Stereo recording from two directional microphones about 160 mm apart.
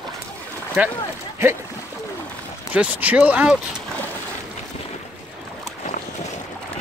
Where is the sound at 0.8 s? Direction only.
10° right (ahead or behind).